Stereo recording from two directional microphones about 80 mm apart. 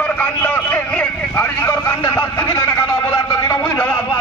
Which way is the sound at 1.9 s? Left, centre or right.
Left.